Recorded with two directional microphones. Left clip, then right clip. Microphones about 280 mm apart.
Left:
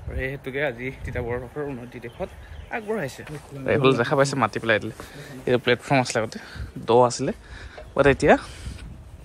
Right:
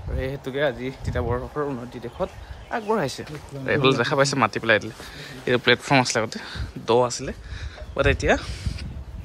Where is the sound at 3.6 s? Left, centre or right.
Centre.